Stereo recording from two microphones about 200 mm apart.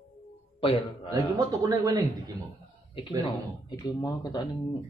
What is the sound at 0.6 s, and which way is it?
Speech, 25° left (ahead or behind).